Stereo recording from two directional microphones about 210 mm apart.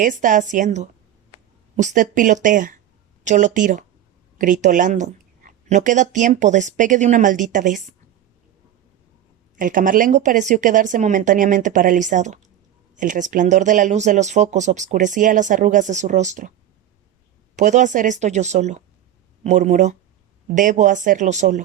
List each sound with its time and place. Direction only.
0.0 s speech: 40° right (ahead or behind)
9.6 s speech: 40° right (ahead or behind)
17.6 s speech: 35° right (ahead or behind)